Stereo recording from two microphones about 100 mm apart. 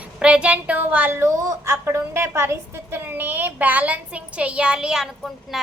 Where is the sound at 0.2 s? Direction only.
10° right (ahead or behind).